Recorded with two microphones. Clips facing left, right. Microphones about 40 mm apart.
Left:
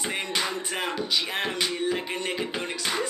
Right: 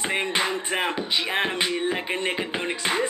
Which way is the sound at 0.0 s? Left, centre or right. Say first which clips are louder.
Right 4 dB; right.